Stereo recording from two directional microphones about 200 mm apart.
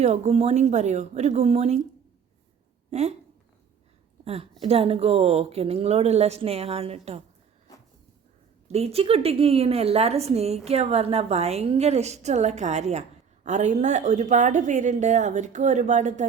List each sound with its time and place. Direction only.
0.0 s a woman's voice: 35° right (ahead or behind)
2.9 s a woman's voice: 35° right (ahead or behind)
4.6 s a woman's voice: 30° right (ahead or behind)
8.6 s a woman's voice: 30° right (ahead or behind)